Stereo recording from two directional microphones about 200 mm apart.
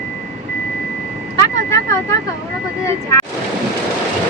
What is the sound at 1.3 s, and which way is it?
Vehicle, 15° left (ahead or behind).